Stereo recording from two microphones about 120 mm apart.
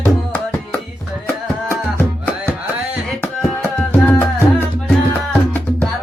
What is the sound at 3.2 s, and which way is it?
Music, 15° left (ahead or behind).